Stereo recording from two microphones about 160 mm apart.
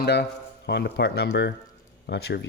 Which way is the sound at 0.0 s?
90° left.